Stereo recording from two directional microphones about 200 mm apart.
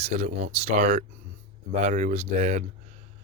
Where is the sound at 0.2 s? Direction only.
35° right (ahead or behind).